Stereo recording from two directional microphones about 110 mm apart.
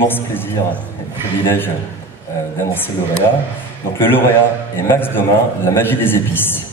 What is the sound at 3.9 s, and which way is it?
Speech, 20° left (ahead or behind).